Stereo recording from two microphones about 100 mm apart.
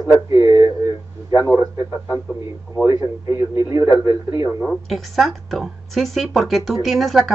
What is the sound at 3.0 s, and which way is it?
Speech, 35° right (ahead or behind).